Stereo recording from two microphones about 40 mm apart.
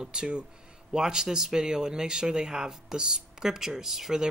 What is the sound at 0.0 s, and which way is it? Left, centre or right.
Speech, centre.